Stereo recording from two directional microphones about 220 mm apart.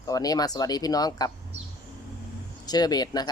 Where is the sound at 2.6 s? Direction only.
20° left (ahead or behind).